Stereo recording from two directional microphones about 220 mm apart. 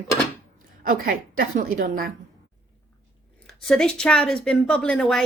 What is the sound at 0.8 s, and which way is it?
A woman's voice, 40° right (ahead or behind).